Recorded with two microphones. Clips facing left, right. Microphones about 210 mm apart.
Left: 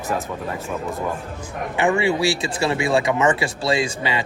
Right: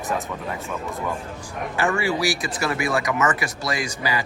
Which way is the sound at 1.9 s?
25° left (ahead or behind).